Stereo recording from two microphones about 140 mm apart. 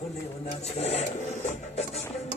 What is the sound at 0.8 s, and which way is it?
Speech, 50° left (ahead or behind).